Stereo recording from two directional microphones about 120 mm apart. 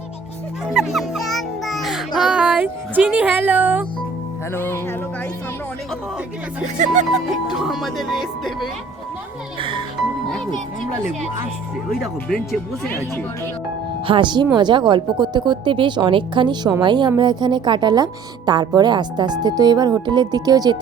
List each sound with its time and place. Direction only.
0.7 s music: centre (ahead or behind)
4.5 s speech: 20° left (ahead or behind)
6.7 s music: 90° right
7.3 s speech: centre (ahead or behind)
9.6 s music: 45° right (ahead or behind)
10.2 s speech: 5° left (ahead or behind)
11.9 s speech: centre (ahead or behind)
14.1 s a woman's voice: 40° right (ahead or behind)